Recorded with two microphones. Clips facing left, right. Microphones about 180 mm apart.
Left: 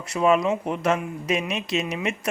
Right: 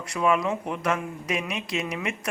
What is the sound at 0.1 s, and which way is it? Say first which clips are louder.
Speech: left 4 dB; 25° left (ahead or behind).